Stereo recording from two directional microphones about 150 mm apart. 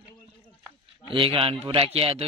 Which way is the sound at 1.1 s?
35° right (ahead or behind).